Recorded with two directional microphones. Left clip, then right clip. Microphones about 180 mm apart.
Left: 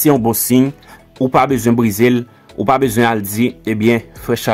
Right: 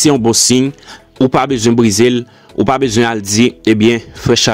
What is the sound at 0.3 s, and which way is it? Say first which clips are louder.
Speech: right 4 dB; 25° right (ahead or behind).